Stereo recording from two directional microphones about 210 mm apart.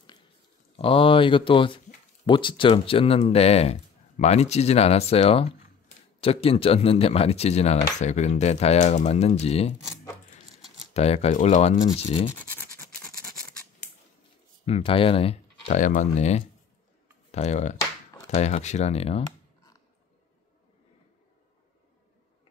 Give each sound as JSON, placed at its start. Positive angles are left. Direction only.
{"t": 0.7, "sound": "speech", "side_deg": 25}
{"t": 10.9, "sound": "speech", "side_deg": 30}
{"t": 12.4, "sound": "scratch", "side_deg": 10}
{"t": 14.7, "sound": "speech", "side_deg": 25}